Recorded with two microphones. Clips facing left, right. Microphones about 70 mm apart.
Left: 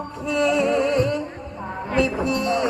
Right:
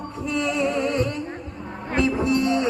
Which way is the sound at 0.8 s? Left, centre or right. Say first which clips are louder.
Left 3 dB; right.